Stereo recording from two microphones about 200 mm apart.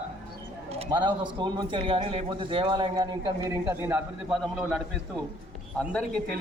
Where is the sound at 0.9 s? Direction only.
25° right (ahead or behind); by 5.2 s 5° right (ahead or behind).